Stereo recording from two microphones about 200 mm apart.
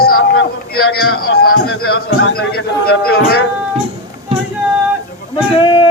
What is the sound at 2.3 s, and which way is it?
A man's voice, 50° left (ahead or behind).